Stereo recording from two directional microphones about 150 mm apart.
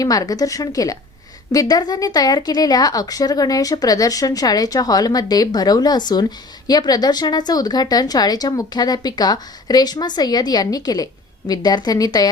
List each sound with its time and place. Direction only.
0.0 s a woman's voice: 25° left (ahead or behind)